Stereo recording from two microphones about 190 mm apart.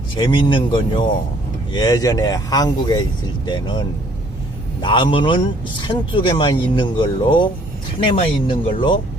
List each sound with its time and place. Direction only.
0.2 s speech: 25° left (ahead or behind)